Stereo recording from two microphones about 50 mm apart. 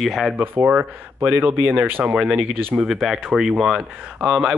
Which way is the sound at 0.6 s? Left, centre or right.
Right.